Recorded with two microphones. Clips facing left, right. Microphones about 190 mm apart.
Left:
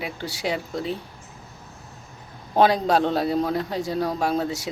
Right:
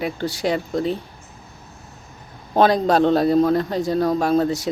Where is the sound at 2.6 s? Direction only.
10° left (ahead or behind).